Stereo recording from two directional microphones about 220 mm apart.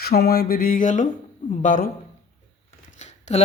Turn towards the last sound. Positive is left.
turn(degrees=30)  # may be behind; listen again after turning